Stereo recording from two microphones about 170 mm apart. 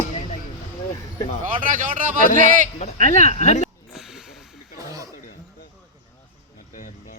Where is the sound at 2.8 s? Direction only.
45° left (ahead or behind).